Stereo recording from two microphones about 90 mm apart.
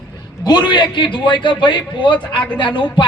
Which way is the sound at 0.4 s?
55° left (ahead or behind).